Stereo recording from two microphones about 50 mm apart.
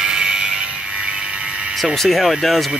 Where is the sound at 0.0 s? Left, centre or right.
Centre.